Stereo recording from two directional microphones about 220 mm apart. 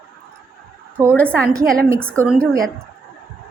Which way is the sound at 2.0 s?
5° left (ahead or behind).